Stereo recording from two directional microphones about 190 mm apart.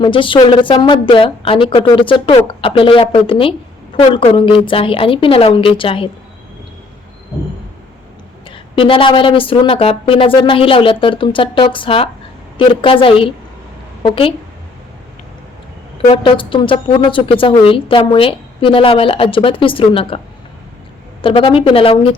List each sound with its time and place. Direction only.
0.0 s speech: 25° left (ahead or behind)
8.4 s speech: 25° left (ahead or behind)
16.0 s speech: 30° left (ahead or behind)